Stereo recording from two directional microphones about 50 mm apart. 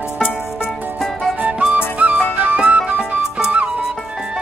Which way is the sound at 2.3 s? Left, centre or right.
Right.